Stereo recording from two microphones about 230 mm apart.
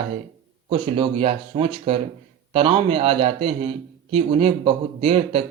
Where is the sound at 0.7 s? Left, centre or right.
Right.